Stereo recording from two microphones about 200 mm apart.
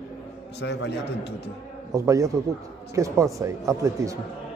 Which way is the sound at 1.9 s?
15° right (ahead or behind).